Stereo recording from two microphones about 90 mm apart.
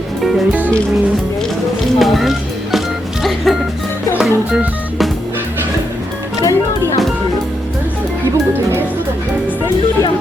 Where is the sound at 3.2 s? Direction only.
Centre (ahead or behind).